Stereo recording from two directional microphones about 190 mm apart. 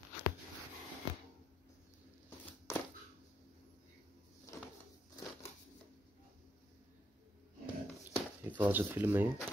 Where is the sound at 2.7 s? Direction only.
15° left (ahead or behind).